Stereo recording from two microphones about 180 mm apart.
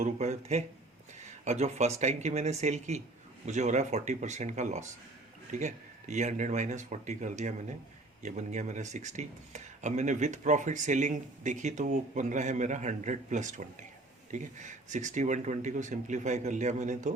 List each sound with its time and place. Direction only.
0.0 s speech: 40° right (ahead or behind)